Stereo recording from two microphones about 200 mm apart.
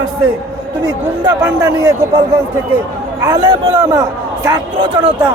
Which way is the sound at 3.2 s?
20° right (ahead or behind).